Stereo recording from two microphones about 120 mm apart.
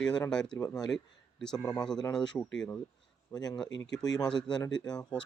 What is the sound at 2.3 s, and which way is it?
Speech, 20° left (ahead or behind).